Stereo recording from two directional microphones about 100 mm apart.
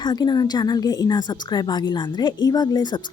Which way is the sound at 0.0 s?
45° left (ahead or behind).